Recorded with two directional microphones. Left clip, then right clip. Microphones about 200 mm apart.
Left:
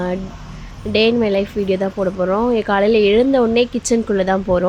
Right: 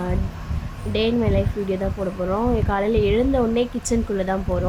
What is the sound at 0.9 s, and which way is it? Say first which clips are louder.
A woman's voice: left 7 dB; 20° left (ahead or behind).